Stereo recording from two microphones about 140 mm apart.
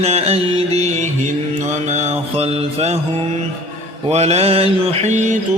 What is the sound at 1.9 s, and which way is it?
Mantra, 50° right (ahead or behind).